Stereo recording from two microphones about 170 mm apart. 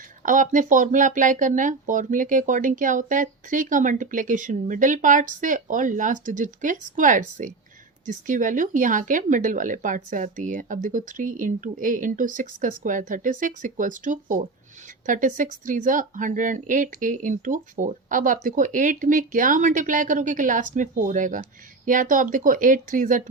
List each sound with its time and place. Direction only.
0.2 s speech: 50° right (ahead or behind)